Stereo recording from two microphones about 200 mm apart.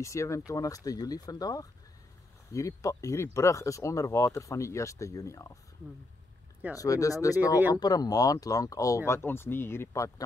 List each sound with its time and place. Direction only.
0.0 s speech: 15° left (ahead or behind)
6.8 s speech: 15° left (ahead or behind)
7.5 s speech: 10° right (ahead or behind)
7.8 s speech: 20° left (ahead or behind)